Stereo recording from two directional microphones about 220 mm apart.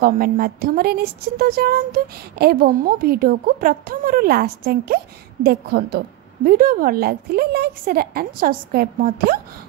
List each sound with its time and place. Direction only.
0.0 s speech: 40° right (ahead or behind)